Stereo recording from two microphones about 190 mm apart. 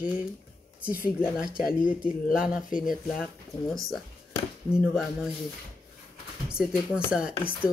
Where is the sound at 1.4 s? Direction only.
50° left (ahead or behind).